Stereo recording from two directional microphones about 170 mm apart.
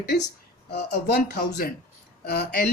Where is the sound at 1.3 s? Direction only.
60° left (ahead or behind).